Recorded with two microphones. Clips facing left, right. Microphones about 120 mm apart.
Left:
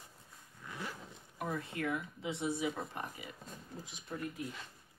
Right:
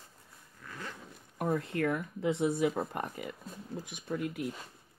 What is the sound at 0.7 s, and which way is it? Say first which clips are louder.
Zipper: even; 15° left (ahead or behind).